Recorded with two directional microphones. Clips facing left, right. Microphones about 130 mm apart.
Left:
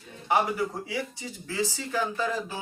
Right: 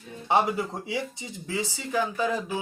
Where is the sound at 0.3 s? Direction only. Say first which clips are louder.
Right 1 dB; 25° right (ahead or behind).